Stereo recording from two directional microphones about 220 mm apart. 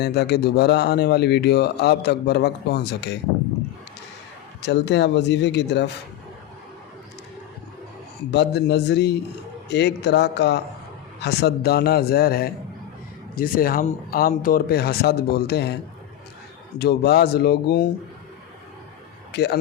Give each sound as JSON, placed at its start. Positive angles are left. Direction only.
{"t": 0.0, "sound": "speech", "side_deg": 50}
{"t": 4.6, "sound": "speech", "side_deg": 50}
{"t": 8.3, "sound": "speech", "side_deg": 50}
{"t": 16.7, "sound": "speech", "side_deg": 50}
{"t": 19.3, "sound": "a man's voice", "side_deg": 45}